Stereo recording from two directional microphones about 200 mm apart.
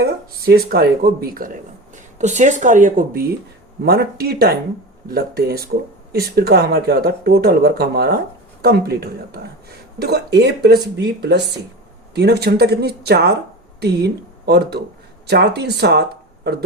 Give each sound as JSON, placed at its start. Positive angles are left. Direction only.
{"t": 0.0, "sound": "speech", "side_deg": -50}
{"t": 2.1, "sound": "speech", "side_deg": -35}